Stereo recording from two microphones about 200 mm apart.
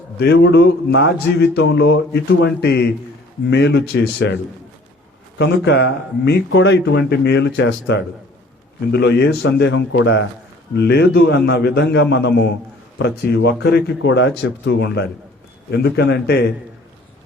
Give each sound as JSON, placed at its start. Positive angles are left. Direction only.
{"t": 0.2, "sound": "speech", "side_deg": 55}
{"t": 5.4, "sound": "speech", "side_deg": 60}